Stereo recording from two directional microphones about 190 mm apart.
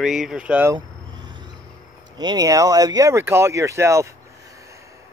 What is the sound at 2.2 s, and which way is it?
Speech, 20° right (ahead or behind).